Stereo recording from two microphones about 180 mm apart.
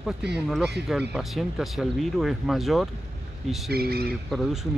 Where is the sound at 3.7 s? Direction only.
60° right (ahead or behind).